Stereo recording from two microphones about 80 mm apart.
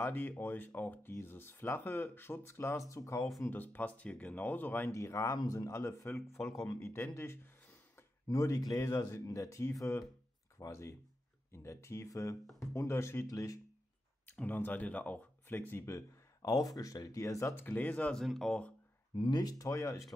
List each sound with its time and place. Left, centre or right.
0.0 s speech: left
3.4 s speech: left
4.9 s speech: left
8.3 s speech: left
14.2 s speech: left
16.4 s speech: left
17.6 s speech: left
18.1 s speech: centre
19.4 s speech: left